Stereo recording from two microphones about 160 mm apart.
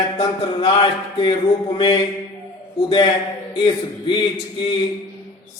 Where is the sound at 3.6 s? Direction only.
30° left (ahead or behind).